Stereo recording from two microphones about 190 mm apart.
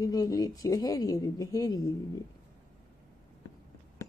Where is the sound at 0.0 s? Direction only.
20° left (ahead or behind).